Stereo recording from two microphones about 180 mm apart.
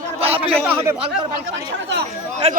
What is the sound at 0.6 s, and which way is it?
Speech, 10° right (ahead or behind).